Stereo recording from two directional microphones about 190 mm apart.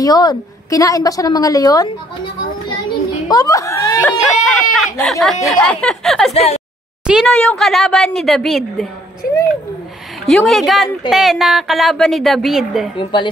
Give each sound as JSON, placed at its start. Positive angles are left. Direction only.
{"t": 0.0, "sound": "a woman's voice", "side_deg": 20}
{"t": 3.3, "sound": "a woman's voice", "side_deg": 20}
{"t": 6.3, "sound": "speech", "side_deg": 30}
{"t": 7.1, "sound": "a woman's voice", "side_deg": 0}
{"t": 10.2, "sound": "a woman's voice", "side_deg": 0}
{"t": 12.9, "sound": "a woman's voice", "side_deg": 25}